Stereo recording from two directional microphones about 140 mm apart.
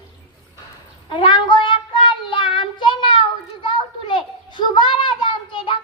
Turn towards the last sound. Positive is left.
turn(degrees=35)  # may be behind; listen again after turning